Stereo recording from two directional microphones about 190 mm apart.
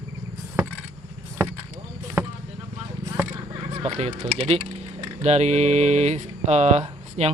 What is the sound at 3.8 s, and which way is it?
Speech, 35° right (ahead or behind).